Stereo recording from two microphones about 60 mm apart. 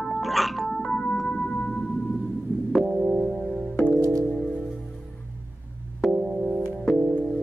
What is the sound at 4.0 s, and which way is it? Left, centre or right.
Music, right.